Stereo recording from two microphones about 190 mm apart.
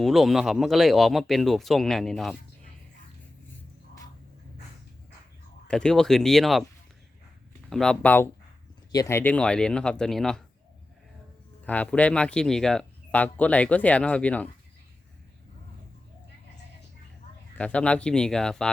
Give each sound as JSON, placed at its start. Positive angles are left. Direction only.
{"t": 0.0, "sound": "speech", "side_deg": 0}
{"t": 5.6, "sound": "speech", "side_deg": 5}
{"t": 7.7, "sound": "speech", "side_deg": 5}
{"t": 11.6, "sound": "speech", "side_deg": 10}
{"t": 17.6, "sound": "speech", "side_deg": 5}